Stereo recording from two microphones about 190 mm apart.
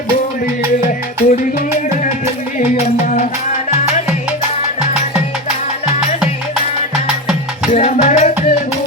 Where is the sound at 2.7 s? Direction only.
35° left (ahead or behind).